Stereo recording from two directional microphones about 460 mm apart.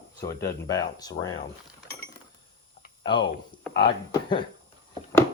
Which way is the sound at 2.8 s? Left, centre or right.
Centre.